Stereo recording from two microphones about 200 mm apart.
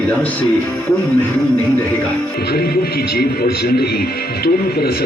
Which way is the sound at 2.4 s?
50° left (ahead or behind).